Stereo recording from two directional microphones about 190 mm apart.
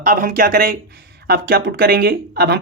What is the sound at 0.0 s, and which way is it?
Speech, 45° right (ahead or behind).